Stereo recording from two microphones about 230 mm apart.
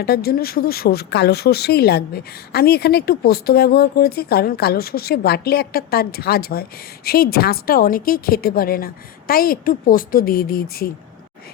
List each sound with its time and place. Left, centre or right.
0.0 s speech: left